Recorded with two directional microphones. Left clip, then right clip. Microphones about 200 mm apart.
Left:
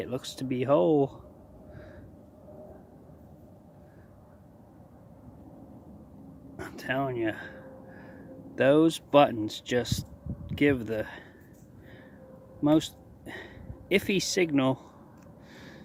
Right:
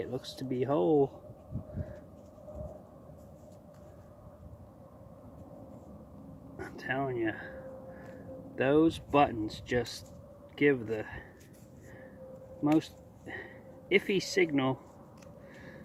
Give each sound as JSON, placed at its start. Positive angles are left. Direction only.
{"t": 0.0, "sound": "speech", "side_deg": 35}
{"t": 6.6, "sound": "speech", "side_deg": 35}
{"t": 8.5, "sound": "speech", "side_deg": 35}
{"t": 12.6, "sound": "speech", "side_deg": 35}